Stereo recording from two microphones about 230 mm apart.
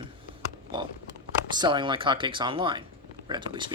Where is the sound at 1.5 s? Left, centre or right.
Centre.